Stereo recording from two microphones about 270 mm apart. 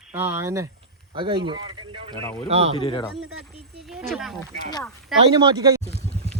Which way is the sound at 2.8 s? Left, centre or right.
Centre.